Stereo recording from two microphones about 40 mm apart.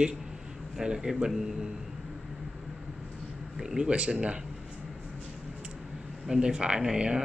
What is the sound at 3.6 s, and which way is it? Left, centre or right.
Speech, centre.